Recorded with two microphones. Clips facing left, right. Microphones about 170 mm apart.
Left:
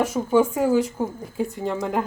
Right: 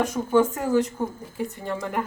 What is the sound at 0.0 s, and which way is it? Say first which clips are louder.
Speech: left 1 dB; 10° left (ahead or behind).